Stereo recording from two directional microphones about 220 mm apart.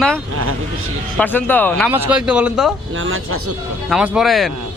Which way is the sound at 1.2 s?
10° left (ahead or behind).